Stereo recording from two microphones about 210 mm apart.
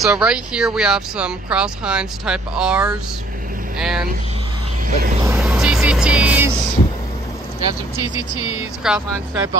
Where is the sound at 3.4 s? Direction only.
40° right (ahead or behind).